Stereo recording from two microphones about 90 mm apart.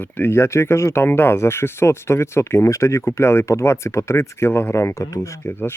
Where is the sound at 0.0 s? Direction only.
20° left (ahead or behind).